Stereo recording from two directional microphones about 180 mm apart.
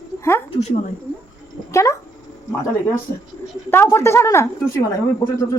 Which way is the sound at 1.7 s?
15° left (ahead or behind).